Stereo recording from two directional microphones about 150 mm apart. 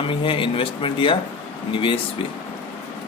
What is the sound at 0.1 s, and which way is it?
Speech, 35° left (ahead or behind).